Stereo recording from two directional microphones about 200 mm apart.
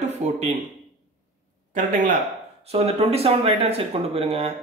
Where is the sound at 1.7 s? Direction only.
40° right (ahead or behind).